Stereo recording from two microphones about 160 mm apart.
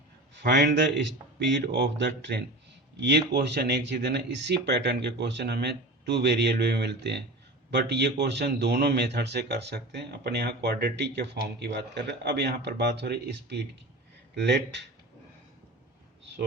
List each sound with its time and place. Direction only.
0.3 s a man's voice: 90° right